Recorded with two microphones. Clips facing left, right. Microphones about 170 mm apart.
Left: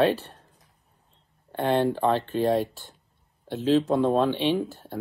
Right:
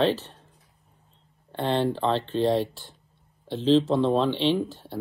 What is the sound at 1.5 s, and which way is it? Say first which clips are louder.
Speech: left 2 dB; 10° left (ahead or behind).